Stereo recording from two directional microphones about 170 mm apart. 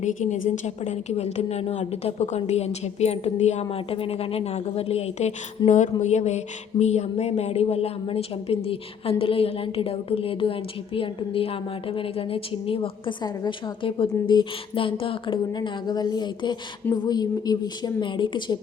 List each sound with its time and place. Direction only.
0.0 s a woman's voice: 45° left (ahead or behind); by 18.6 s 25° left (ahead or behind)